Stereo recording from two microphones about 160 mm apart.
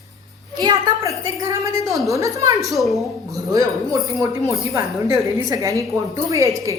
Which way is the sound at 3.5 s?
20° right (ahead or behind).